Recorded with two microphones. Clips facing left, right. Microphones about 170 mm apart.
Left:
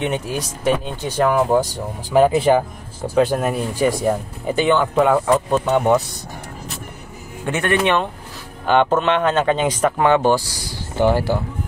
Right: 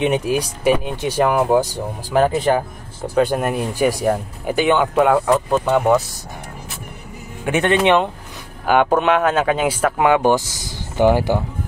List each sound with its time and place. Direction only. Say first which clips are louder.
0.0 s speech: right 5 dB; 15° right (ahead or behind)
2.1 s speech: left 2 dB; 5° left (ahead or behind)
7.4 s speech: right 3 dB; 20° right (ahead or behind)